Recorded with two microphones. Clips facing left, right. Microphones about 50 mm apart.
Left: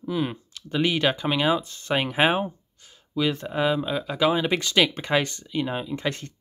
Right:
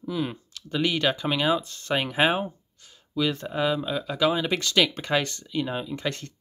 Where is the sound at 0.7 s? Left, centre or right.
Centre.